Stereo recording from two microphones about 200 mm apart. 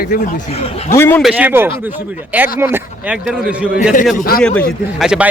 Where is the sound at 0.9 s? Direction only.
10° left (ahead or behind).